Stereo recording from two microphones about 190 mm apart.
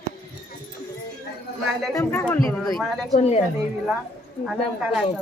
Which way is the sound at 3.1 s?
35° left (ahead or behind).